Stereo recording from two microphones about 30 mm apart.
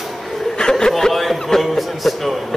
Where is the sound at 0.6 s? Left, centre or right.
Left.